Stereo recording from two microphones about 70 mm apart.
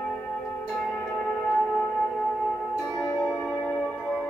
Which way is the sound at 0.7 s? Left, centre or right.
Left.